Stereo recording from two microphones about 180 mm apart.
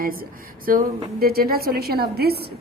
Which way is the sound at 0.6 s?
50° right (ahead or behind).